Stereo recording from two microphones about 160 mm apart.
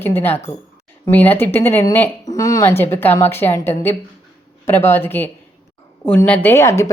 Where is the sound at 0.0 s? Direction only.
15° left (ahead or behind).